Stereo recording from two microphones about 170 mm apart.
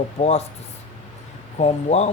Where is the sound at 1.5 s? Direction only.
40° left (ahead or behind).